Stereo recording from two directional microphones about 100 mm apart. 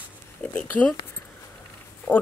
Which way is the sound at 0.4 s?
15° left (ahead or behind).